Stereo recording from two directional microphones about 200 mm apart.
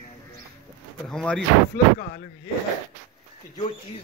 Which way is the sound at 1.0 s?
5° left (ahead or behind).